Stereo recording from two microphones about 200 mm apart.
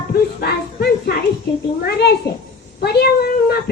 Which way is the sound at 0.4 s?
55° left (ahead or behind).